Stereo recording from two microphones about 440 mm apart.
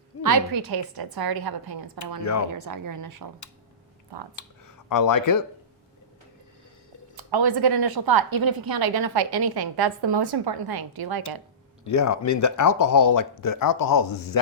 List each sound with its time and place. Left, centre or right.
0.2 s a woman's voice: right
4.1 s a woman's voice: right
4.9 s speech: left
7.2 s a woman's voice: right
11.9 s speech: left